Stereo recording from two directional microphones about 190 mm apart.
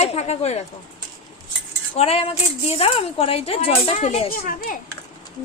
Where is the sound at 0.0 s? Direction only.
35° left (ahead or behind).